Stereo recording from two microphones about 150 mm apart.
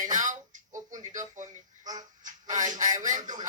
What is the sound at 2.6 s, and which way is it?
Speech, 55° right (ahead or behind).